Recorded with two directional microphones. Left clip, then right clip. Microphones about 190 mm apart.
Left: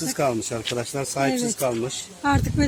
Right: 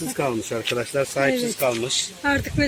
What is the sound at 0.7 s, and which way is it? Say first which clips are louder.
Speech: right 5 dB; 55° left (ahead or behind).